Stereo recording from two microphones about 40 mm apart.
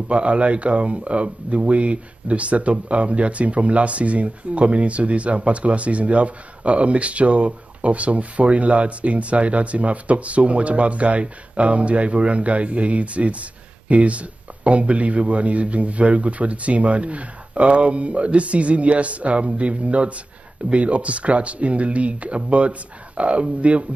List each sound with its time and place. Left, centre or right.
0.1 s speech: right